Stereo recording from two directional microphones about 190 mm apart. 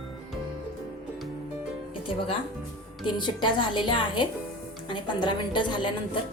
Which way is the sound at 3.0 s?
25° left (ahead or behind).